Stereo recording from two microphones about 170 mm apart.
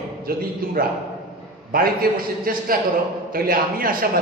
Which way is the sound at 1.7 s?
60° right (ahead or behind).